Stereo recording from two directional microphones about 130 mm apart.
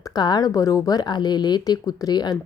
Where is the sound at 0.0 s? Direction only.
30° left (ahead or behind).